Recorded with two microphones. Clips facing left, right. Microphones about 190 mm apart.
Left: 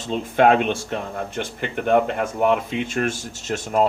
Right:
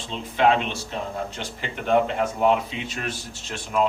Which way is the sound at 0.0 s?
50° left (ahead or behind).